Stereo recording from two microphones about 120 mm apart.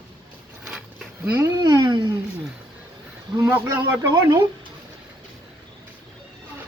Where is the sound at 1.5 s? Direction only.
35° right (ahead or behind).